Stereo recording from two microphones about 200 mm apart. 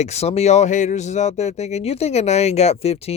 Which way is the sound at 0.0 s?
30° left (ahead or behind).